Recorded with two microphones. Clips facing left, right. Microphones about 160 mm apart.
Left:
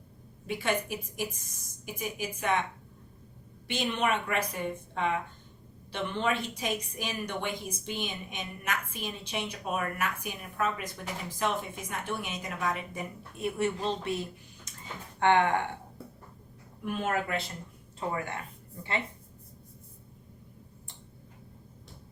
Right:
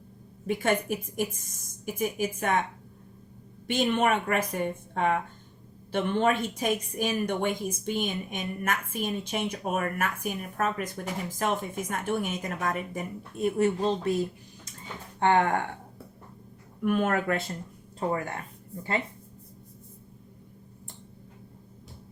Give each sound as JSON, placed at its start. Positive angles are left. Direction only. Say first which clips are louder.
{"t": 0.4, "sound": "a woman's voice", "louder": "right 4 dB", "side_deg": -45}
{"t": 3.7, "sound": "a woman's voice", "louder": "right 5 dB", "side_deg": -45}
{"t": 15.2, "sound": "speech", "louder": "right 1 dB", "side_deg": -40}
{"t": 16.8, "sound": "a woman's voice", "louder": "right 6 dB", "side_deg": -55}